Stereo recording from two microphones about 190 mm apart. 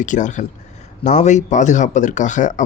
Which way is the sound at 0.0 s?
40° left (ahead or behind).